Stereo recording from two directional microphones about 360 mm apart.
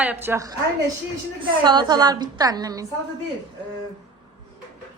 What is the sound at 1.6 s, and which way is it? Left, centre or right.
A woman's voice, centre.